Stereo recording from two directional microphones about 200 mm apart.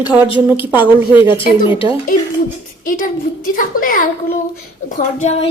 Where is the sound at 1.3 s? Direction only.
25° left (ahead or behind).